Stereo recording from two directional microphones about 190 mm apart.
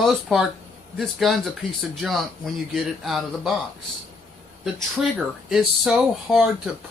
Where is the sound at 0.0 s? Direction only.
Centre (ahead or behind).